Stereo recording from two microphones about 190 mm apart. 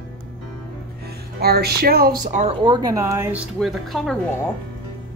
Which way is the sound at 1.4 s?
55° right (ahead or behind).